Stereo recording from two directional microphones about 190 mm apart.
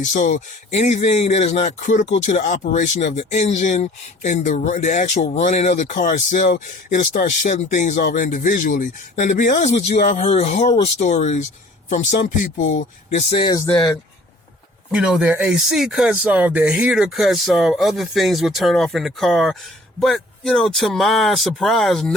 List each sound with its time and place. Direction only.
0.0 s speech: 40° left (ahead or behind)
13.3 s speech: 25° left (ahead or behind)
14.9 s speech: 5° right (ahead or behind)